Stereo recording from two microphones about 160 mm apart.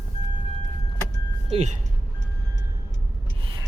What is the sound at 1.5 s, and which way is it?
Speech, 45° right (ahead or behind).